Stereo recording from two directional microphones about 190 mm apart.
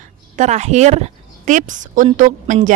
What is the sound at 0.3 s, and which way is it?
A woman's voice, 35° right (ahead or behind).